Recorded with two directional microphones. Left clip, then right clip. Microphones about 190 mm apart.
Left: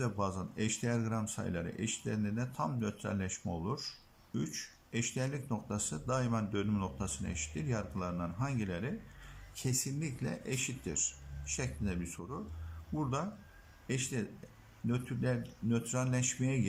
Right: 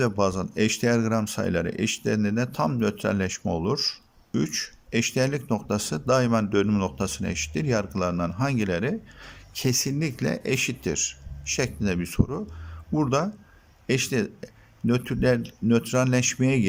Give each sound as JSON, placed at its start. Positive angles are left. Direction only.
{"t": 0.0, "sound": "speech", "side_deg": -50}